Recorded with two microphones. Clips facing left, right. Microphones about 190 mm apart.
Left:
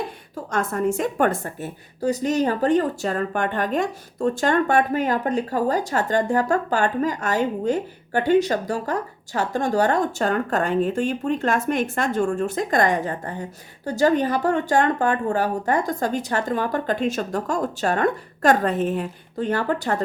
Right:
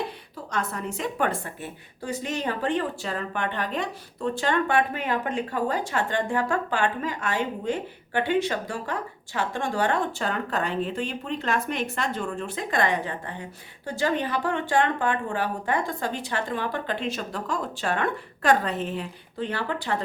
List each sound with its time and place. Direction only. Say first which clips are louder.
0.5 s a woman's voice: left 8 dB; 50° left (ahead or behind)